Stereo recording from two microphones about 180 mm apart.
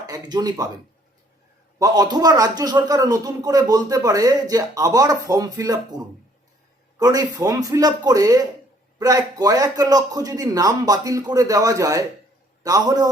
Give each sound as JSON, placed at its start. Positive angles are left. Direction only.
{"t": 0.0, "sound": "a man's voice", "side_deg": -20}
{"t": 1.8, "sound": "a man's voice", "side_deg": -20}
{"t": 7.0, "sound": "a man's voice", "side_deg": -20}